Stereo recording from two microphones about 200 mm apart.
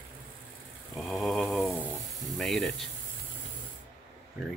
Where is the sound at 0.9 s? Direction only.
Centre (ahead or behind).